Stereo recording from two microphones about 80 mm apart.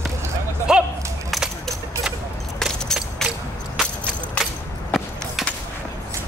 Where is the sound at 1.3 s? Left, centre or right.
Centre.